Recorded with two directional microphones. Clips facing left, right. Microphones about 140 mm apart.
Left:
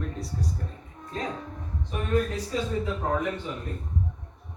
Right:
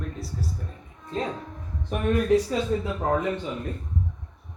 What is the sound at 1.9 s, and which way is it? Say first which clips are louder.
Speech: right 4 dB; 55° right (ahead or behind).